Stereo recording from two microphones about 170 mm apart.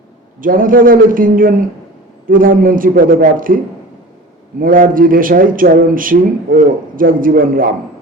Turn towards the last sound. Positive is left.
turn(degrees=-55)  # may be behind; listen again after turning